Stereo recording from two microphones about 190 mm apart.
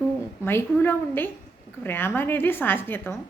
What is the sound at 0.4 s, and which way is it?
Speech, 10° left (ahead or behind).